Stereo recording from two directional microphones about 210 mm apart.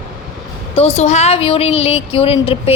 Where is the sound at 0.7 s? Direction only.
30° left (ahead or behind).